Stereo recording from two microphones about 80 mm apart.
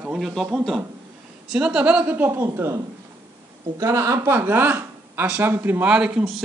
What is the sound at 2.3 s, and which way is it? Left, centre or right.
A woman's voice, right.